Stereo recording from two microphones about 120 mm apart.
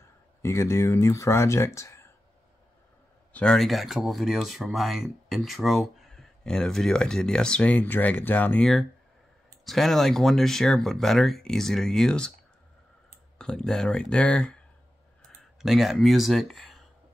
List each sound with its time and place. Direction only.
0.4 s speech: 20° left (ahead or behind)
3.3 s speech: 5° left (ahead or behind)
9.7 s speech: centre (ahead or behind)
13.4 s speech: 5° left (ahead or behind)
15.6 s speech: 5° right (ahead or behind)